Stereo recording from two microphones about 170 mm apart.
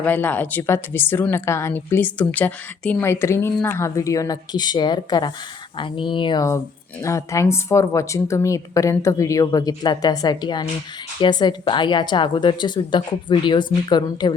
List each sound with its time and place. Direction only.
0.0 s a woman's voice: 10° left (ahead or behind); by 14.3 s 25° left (ahead or behind)